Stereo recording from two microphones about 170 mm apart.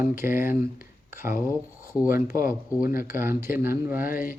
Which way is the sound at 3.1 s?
15° right (ahead or behind).